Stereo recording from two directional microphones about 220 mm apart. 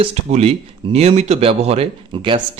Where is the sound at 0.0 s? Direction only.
25° right (ahead or behind).